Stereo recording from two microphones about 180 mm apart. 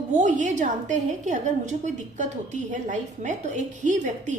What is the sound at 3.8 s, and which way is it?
Speech, 45° right (ahead or behind).